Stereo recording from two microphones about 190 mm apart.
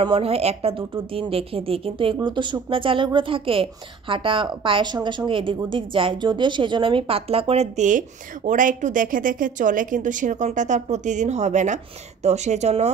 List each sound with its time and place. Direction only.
0.0 s speech: 30° right (ahead or behind)